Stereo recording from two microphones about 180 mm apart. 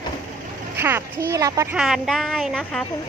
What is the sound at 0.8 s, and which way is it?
Speech, 10° right (ahead or behind).